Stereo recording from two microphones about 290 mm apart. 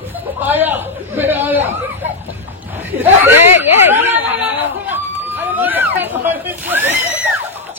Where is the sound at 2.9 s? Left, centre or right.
Centre.